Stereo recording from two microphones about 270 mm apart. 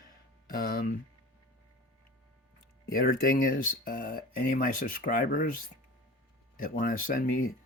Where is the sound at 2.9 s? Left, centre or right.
Left.